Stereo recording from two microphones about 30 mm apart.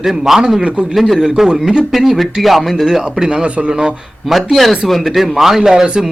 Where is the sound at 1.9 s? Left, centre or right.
Centre.